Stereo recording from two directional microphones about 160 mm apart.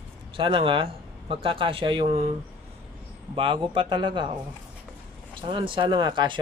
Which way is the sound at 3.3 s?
30° right (ahead or behind).